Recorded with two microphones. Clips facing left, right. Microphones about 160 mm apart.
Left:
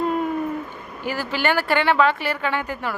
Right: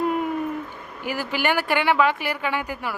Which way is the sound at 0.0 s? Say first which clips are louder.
Left 1 dB; 10° right (ahead or behind).